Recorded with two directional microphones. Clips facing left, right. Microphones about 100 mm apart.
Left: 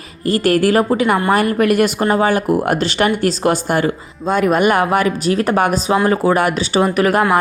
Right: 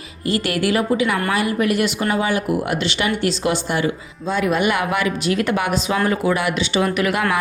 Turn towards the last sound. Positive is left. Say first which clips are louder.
# left 5 dB
turn(degrees=40)  # may be behind; listen again after turning